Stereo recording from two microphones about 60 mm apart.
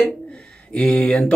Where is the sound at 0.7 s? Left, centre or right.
Centre.